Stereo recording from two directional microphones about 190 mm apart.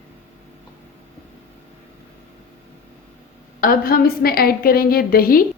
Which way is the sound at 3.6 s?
50° left (ahead or behind).